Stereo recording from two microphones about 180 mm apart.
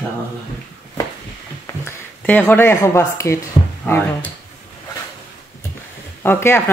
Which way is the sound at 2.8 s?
15° left (ahead or behind).